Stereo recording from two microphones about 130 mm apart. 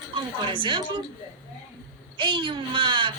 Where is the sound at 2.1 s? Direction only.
40° right (ahead or behind).